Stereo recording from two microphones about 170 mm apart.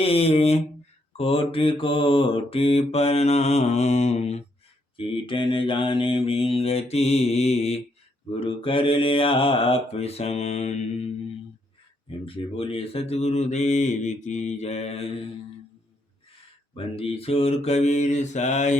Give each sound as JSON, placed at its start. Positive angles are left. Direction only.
{"t": 0.0, "sound": "speech", "side_deg": 35}
{"t": 1.1, "sound": "mantra", "side_deg": 35}
{"t": 12.2, "sound": "mantra", "side_deg": 30}
{"t": 16.7, "sound": "mantra", "side_deg": 35}